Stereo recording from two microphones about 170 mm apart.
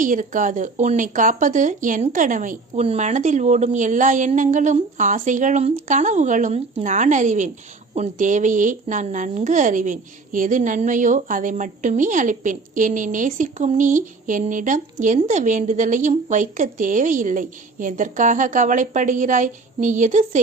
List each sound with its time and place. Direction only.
0.0 s a woman's voice: 50° right (ahead or behind)